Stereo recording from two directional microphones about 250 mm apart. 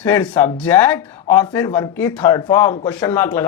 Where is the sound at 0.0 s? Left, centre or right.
Centre.